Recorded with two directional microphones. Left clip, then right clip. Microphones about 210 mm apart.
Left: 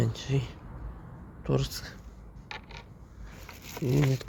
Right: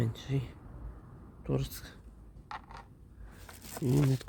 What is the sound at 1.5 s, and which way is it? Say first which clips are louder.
Speech: left 6 dB; 5° right (ahead or behind).